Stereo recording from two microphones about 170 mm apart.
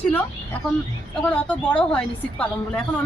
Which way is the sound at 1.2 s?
5° left (ahead or behind).